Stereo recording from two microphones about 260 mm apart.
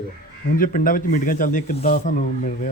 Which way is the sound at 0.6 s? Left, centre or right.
Left.